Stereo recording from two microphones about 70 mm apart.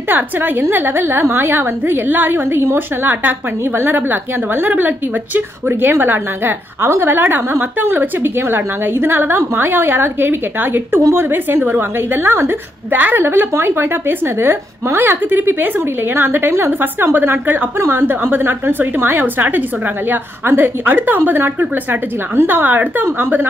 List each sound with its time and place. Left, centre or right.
0.1 s a woman's voice: right